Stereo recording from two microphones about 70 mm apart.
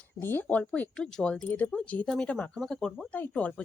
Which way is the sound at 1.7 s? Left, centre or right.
Centre.